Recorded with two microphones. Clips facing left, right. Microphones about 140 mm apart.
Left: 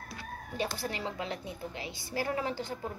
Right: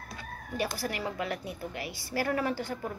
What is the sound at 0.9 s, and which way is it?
A woman's voice, 25° left (ahead or behind).